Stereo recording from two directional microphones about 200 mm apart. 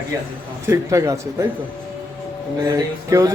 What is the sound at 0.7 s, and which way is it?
Speech, 15° right (ahead or behind).